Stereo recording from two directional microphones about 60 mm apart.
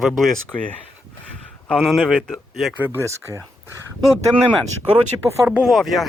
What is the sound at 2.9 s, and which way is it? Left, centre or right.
Speech, right.